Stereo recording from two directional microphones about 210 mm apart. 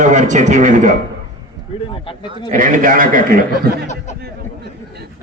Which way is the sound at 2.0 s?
25° left (ahead or behind).